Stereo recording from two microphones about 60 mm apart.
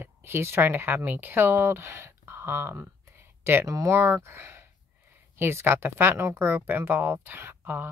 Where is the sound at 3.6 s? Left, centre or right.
Right.